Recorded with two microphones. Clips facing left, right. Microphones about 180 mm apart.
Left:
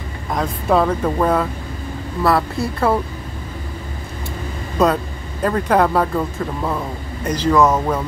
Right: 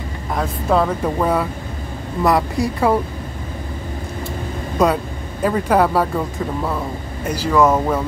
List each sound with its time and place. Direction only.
0.4 s speech: 5° right (ahead or behind)
4.8 s speech: 10° right (ahead or behind)